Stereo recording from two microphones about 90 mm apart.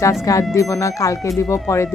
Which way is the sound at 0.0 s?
35° left (ahead or behind).